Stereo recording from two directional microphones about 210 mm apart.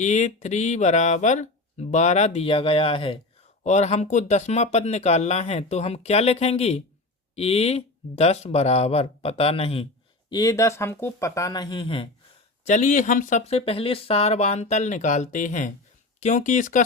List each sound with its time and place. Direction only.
0.0 s speech: 35° left (ahead or behind)
10.2 s speech: 15° left (ahead or behind)
12.6 s speech: 35° left (ahead or behind)